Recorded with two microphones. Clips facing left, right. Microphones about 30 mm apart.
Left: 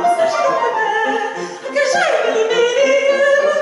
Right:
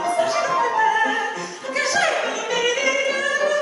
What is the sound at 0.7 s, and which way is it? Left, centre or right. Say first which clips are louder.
Music: left 2 dB; centre.